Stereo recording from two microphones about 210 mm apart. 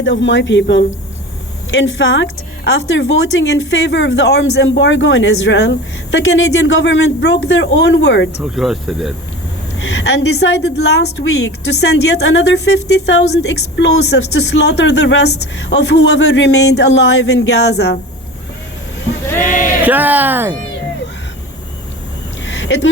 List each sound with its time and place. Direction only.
0.0 s a woman's voice: 60° left (ahead or behind)
8.4 s speech: centre (ahead or behind)
10.0 s a woman's voice: 55° left (ahead or behind)
19.4 s speech: 35° left (ahead or behind)
19.8 s speech: 10° right (ahead or behind)
22.4 s a sound: 60° left (ahead or behind)